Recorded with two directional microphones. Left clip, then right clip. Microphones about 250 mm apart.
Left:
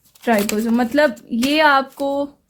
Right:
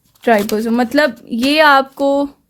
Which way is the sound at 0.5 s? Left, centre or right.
Right.